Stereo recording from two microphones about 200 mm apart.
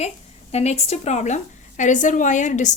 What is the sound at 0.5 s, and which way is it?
A woman's voice, 30° left (ahead or behind).